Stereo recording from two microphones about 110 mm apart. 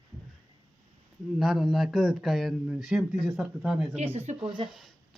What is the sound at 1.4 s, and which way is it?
Speech, centre (ahead or behind).